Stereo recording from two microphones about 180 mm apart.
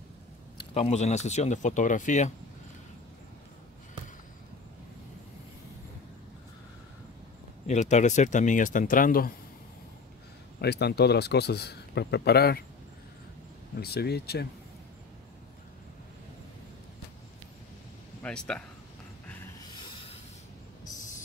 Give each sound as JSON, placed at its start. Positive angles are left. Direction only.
{"t": 0.6, "sound": "speech", "side_deg": 35}
{"t": 7.6, "sound": "speech", "side_deg": 40}
{"t": 10.6, "sound": "a man's voice", "side_deg": 65}
{"t": 13.7, "sound": "a man's voice", "side_deg": 60}
{"t": 18.2, "sound": "speech", "side_deg": 5}